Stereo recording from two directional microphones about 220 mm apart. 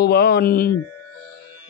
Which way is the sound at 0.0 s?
45° left (ahead or behind).